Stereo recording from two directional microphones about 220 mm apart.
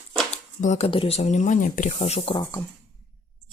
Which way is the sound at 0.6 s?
30° left (ahead or behind).